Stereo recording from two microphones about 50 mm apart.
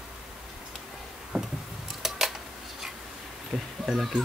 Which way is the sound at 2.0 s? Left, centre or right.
Centre.